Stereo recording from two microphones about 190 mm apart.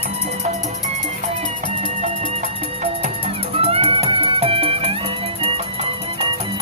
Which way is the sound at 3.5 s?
30° right (ahead or behind).